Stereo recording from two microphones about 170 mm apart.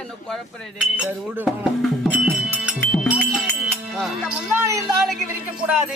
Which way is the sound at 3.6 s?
Centre (ahead or behind).